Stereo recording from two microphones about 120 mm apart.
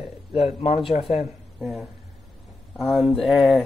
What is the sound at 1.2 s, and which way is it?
A woman's voice, centre (ahead or behind).